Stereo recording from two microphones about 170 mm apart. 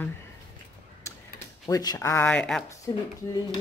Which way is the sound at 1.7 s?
20° left (ahead or behind).